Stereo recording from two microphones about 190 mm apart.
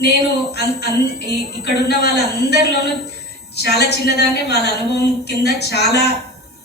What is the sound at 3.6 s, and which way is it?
A woman's voice, 60° left (ahead or behind).